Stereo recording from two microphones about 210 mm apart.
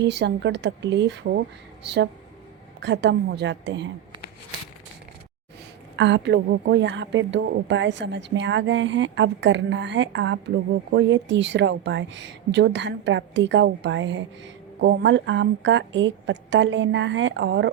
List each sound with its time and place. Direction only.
0.0 s a woman's voice: 55° right (ahead or behind)
2.8 s a woman's voice: 55° right (ahead or behind)
6.0 s a woman's voice: 60° right (ahead or behind)